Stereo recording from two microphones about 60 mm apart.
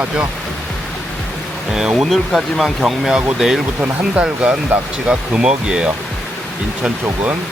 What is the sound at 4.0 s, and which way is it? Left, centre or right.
Speech, centre.